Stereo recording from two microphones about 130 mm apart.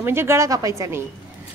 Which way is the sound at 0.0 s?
20° right (ahead or behind).